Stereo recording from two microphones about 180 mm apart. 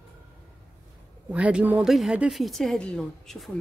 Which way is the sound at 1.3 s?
5° right (ahead or behind).